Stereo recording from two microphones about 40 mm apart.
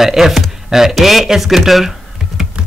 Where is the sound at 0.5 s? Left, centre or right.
Centre.